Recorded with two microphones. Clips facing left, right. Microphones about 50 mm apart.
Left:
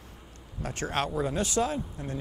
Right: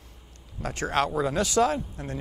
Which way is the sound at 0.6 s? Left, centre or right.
Right.